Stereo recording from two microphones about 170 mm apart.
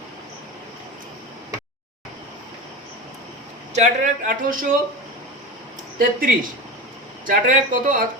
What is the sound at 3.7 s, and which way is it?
Speech, 45° right (ahead or behind).